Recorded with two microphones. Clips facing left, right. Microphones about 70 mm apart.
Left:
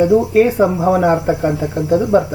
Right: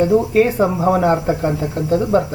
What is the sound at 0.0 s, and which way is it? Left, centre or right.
Speech, centre.